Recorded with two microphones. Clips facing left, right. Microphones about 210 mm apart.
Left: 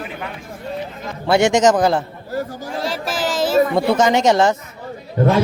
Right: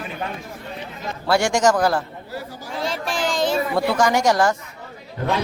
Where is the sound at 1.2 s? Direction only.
20° left (ahead or behind).